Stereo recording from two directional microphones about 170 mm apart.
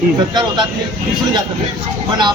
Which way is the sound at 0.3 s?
25° right (ahead or behind).